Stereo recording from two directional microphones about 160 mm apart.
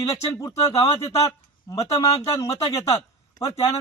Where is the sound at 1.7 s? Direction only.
20° left (ahead or behind).